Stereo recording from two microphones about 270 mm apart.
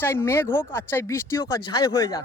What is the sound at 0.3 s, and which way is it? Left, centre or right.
Speech, centre.